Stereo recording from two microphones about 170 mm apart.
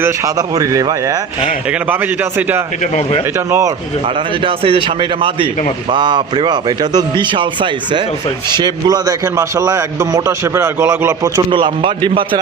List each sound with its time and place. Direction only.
0.0 s a man's voice: 20° right (ahead or behind)
2.8 s speech: 45° left (ahead or behind)
3.3 s speech: 15° right (ahead or behind)
4.4 s a man's voice: 30° right (ahead or behind)